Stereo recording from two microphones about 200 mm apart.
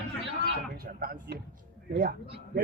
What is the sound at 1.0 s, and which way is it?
Speech, 50° right (ahead or behind).